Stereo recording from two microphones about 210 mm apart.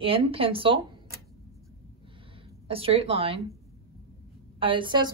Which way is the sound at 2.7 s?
25° right (ahead or behind).